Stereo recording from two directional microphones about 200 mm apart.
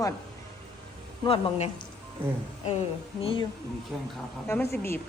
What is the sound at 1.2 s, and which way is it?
Speech, 25° left (ahead or behind).